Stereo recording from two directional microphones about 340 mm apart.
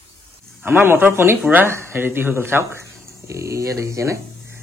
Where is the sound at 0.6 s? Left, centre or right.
Centre.